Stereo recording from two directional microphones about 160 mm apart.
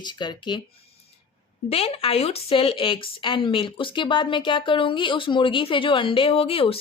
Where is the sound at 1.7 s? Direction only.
40° left (ahead or behind).